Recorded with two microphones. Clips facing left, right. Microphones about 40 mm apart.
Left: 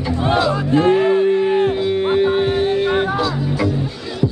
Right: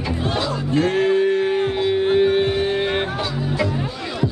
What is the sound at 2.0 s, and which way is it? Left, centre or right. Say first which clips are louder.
Music: even; centre.